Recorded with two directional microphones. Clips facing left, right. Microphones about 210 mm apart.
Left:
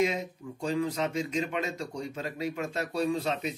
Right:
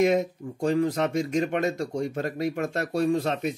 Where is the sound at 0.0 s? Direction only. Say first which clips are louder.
Right 7 dB; 50° right (ahead or behind).